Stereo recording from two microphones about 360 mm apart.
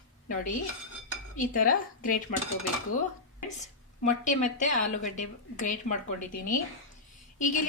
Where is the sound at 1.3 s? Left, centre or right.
Left.